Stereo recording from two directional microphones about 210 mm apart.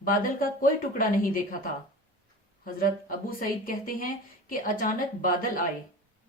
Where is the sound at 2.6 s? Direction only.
40° left (ahead or behind).